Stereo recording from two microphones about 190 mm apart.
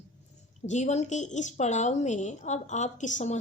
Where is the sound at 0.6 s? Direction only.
35° left (ahead or behind).